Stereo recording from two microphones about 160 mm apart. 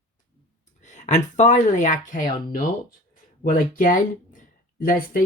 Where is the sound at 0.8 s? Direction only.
50° left (ahead or behind).